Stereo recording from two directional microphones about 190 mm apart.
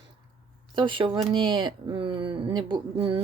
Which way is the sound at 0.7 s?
25° right (ahead or behind).